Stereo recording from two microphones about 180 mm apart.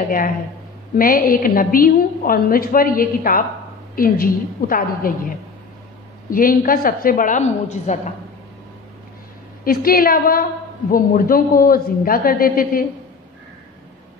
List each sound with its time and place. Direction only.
0.9 s a woman's voice: 50° left (ahead or behind)
6.3 s a woman's voice: 50° left (ahead or behind)
9.7 s a woman's voice: 55° left (ahead or behind)